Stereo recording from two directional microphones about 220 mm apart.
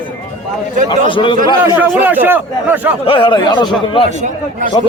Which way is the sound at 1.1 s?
20° left (ahead or behind).